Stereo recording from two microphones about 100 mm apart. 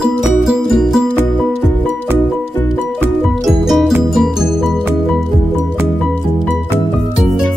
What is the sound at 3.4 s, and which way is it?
Music, centre (ahead or behind).